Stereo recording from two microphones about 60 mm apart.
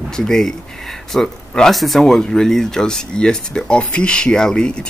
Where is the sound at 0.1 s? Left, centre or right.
Centre.